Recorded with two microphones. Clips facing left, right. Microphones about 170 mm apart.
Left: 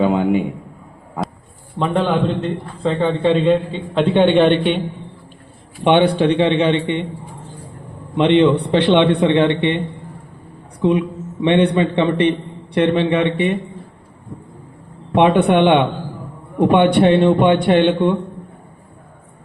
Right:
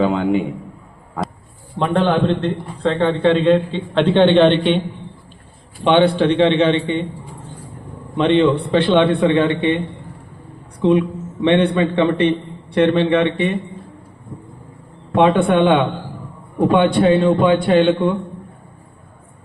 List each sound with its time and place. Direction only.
0.0 s a sound: 10° left (ahead or behind)
1.8 s a man's voice: centre (ahead or behind)
5.8 s a man's voice: 15° left (ahead or behind)
8.1 s a man's voice: 20° left (ahead or behind)
11.3 s a man's voice: 15° left (ahead or behind)
15.1 s a man's voice: 20° left (ahead or behind)